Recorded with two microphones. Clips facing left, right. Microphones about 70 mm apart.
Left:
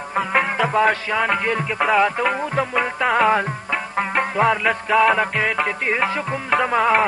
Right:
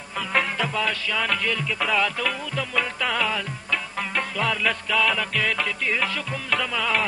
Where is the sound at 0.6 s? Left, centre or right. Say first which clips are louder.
Left 8 dB; left.